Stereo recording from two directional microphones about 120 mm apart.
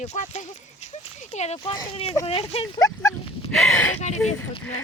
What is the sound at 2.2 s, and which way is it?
Speech, 55° left (ahead or behind).